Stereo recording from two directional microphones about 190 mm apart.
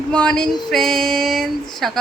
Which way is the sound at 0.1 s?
5° left (ahead or behind).